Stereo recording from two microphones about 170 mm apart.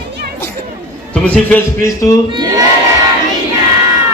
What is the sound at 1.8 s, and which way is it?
Speech, 20° left (ahead or behind).